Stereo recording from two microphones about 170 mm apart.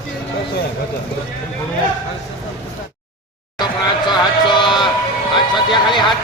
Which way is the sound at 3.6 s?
25° left (ahead or behind).